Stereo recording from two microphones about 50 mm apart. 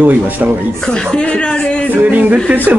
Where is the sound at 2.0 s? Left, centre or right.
Right.